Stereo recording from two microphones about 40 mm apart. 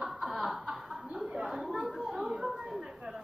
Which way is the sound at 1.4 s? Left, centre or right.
Centre.